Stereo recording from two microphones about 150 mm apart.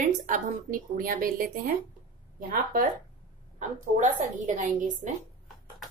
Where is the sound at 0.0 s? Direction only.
65° right (ahead or behind).